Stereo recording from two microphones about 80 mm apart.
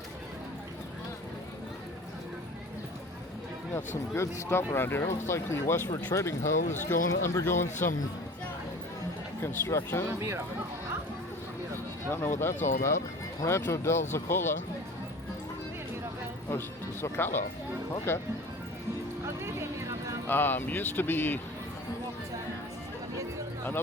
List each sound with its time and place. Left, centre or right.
3.8 s speech: left
9.4 s speech: left
10.2 s speech: right
12.1 s speech: left
16.5 s speech: left
19.4 s a sound: right
20.2 s speech: left